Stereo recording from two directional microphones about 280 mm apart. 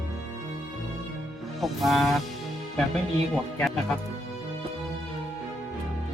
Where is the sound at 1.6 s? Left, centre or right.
Centre.